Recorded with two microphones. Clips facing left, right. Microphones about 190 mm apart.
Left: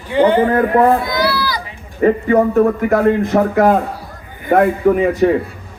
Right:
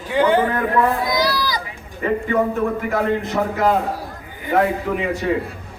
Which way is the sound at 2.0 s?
45° left (ahead or behind).